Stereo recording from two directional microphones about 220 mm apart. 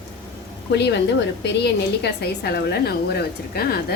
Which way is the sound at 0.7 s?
50° left (ahead or behind).